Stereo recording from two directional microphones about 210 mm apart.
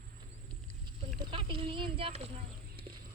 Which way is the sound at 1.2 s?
25° right (ahead or behind).